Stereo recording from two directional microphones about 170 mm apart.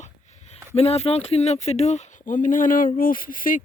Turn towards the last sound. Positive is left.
turn(degrees=55)  # may be behind; listen again after turning